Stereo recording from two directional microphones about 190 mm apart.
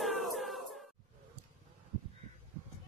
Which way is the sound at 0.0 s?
Centre (ahead or behind).